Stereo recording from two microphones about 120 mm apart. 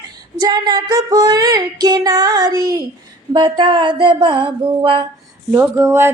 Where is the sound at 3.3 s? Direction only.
40° right (ahead or behind).